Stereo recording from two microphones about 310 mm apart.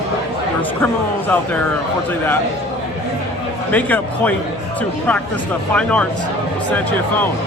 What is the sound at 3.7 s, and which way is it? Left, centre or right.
Speech, centre.